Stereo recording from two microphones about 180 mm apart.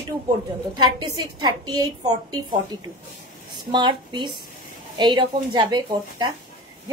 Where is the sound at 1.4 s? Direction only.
20° right (ahead or behind).